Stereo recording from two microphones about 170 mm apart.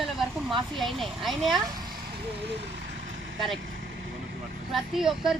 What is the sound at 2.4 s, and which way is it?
Vehicle, 85° right.